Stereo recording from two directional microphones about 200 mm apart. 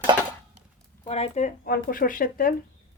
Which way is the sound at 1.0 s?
30° left (ahead or behind).